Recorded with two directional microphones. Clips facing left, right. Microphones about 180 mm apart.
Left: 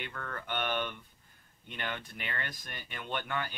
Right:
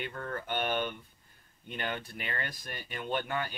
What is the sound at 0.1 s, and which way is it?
Speech, 25° right (ahead or behind).